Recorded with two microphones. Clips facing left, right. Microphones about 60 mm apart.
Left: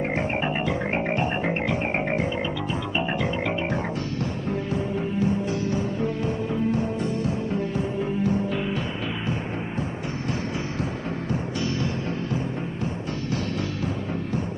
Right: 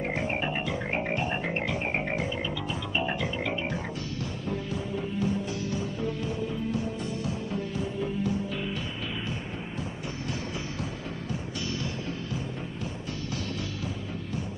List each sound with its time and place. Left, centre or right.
0.7 s music: left